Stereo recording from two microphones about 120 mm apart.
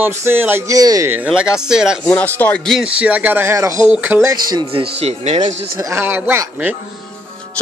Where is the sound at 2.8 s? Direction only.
10° right (ahead or behind).